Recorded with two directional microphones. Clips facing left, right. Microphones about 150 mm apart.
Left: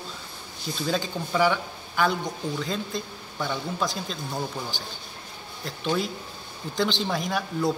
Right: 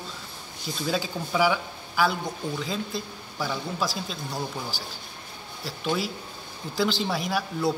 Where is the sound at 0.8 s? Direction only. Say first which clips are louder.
Even; 5° right (ahead or behind).